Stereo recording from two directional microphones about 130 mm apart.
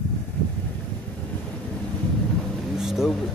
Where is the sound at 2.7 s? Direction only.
5° right (ahead or behind).